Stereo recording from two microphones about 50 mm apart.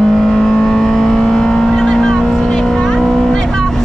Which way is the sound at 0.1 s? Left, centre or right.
Centre.